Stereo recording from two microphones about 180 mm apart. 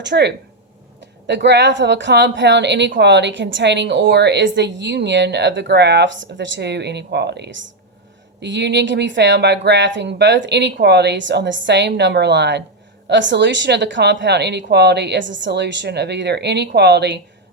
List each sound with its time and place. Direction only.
0.0 s speech: 70° right (ahead or behind)
13.1 s speech: 85° right